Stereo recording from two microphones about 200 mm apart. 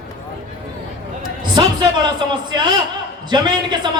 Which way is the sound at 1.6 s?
20° right (ahead or behind).